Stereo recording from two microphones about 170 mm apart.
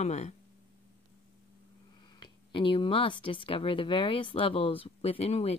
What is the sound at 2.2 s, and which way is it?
Speech, 30° left (ahead or behind).